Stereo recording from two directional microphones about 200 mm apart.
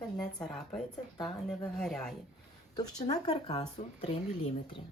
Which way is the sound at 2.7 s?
20° left (ahead or behind).